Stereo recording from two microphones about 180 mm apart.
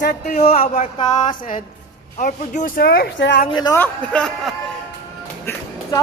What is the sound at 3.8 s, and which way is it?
Speech, 5° left (ahead or behind).